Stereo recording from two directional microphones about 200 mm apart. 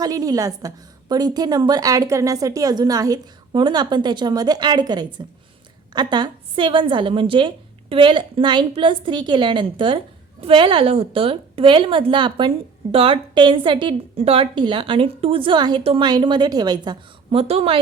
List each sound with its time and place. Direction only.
0.0 s a woman's voice: 20° right (ahead or behind)